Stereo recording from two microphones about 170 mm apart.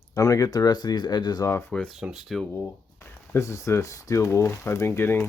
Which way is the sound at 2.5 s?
15° left (ahead or behind).